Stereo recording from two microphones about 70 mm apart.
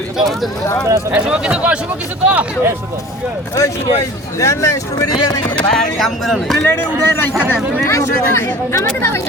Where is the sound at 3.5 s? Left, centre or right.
Left.